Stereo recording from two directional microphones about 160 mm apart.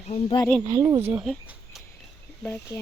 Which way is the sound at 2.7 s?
25° left (ahead or behind).